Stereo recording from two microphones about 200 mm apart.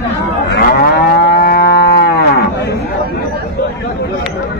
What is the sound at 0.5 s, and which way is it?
Moo, 50° left (ahead or behind).